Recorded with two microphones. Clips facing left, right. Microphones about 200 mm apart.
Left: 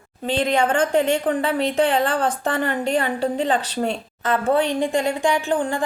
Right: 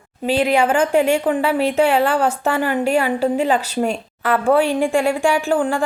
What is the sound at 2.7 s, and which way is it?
A woman's voice, 5° right (ahead or behind).